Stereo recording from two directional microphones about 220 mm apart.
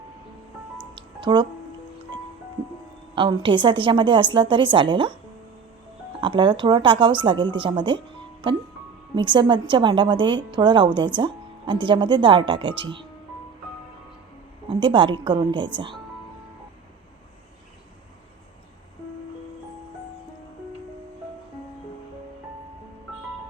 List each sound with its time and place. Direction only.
0.9 s music: 20° right (ahead or behind)
3.2 s a woman's voice: 20° right (ahead or behind)
6.1 s a woman's voice: 20° right (ahead or behind)
14.7 s a woman's voice: 20° right (ahead or behind)